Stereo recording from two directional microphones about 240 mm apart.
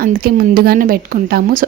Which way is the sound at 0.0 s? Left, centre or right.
Right.